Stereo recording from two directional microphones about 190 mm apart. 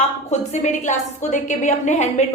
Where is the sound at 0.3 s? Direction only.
35° left (ahead or behind).